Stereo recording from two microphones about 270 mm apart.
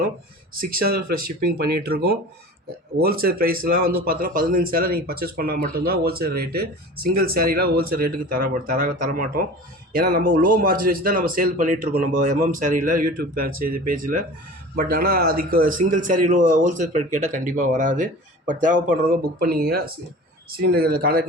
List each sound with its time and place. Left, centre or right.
0.5 s speech: right